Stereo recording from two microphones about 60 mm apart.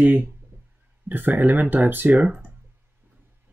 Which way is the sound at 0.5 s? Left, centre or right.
Right.